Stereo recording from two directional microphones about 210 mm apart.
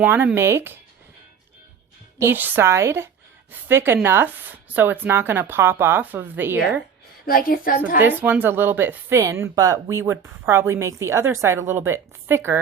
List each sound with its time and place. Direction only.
0.0 s speech: 10° right (ahead or behind)
2.1 s speech: 10° right (ahead or behind)
7.3 s a woman's voice: 45° left (ahead or behind)
8.0 s speech: 5° right (ahead or behind)